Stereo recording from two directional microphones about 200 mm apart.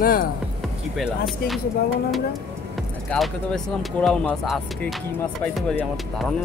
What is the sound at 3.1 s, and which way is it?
Speech, centre (ahead or behind).